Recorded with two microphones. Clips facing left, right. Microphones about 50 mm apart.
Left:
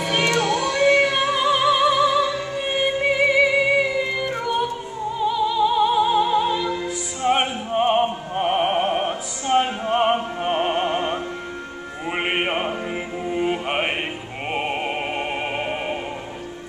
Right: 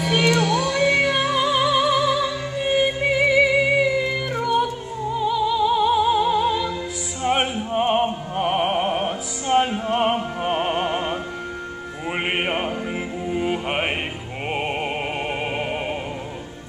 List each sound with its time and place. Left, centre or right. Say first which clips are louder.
0.4 s music: even; left
0.8 s music: left 4 dB; centre
7.2 s opera: left 1 dB; centre
10.4 s music: even; centre